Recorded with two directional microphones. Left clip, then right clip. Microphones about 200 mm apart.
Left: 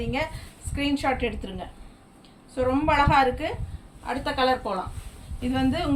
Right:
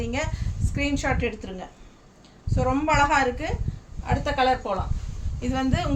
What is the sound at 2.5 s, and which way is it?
A woman's voice, 15° right (ahead or behind).